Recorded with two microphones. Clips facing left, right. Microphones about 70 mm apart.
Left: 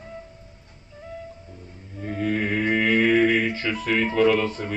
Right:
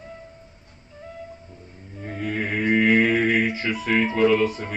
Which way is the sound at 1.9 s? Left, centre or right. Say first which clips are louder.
Left 3 dB; centre.